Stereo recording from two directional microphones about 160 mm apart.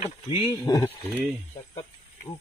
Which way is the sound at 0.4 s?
25° left (ahead or behind).